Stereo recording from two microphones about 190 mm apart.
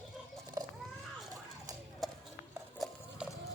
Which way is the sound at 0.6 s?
20° right (ahead or behind).